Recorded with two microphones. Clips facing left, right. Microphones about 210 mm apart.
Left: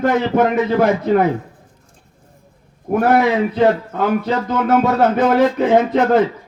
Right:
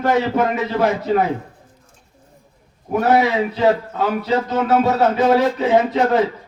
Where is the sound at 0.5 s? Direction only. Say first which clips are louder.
Left 4 dB; 55° left (ahead or behind).